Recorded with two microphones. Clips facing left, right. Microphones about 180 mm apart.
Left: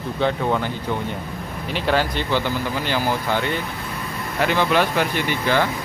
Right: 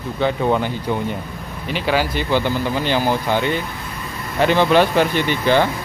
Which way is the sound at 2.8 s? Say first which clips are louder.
Right 3 dB; 20° right (ahead or behind).